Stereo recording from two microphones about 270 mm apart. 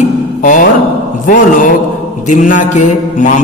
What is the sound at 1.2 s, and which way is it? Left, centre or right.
Mantra, left.